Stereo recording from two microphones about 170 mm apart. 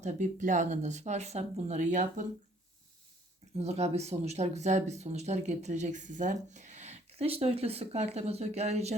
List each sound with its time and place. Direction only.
0.0 s speech: 45° right (ahead or behind)
3.6 s speech: 40° right (ahead or behind)